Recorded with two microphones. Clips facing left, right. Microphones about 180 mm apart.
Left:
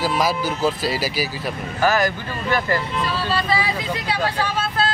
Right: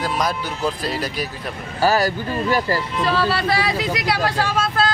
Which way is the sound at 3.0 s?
75° right (ahead or behind).